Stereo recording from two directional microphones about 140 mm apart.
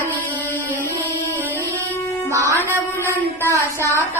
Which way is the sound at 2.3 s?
20° right (ahead or behind).